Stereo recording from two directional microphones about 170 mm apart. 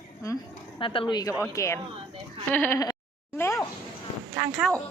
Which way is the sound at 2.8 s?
15° left (ahead or behind).